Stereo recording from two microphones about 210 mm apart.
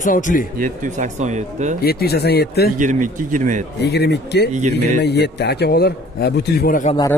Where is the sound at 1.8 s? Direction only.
50° left (ahead or behind).